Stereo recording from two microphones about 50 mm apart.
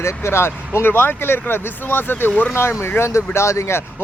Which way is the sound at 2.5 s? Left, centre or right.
Left.